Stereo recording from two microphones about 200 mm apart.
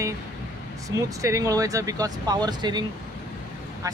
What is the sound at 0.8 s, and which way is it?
Speech, 15° right (ahead or behind).